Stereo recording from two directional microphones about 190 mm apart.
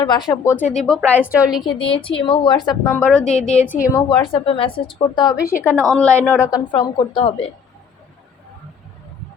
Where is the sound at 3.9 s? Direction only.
25° left (ahead or behind).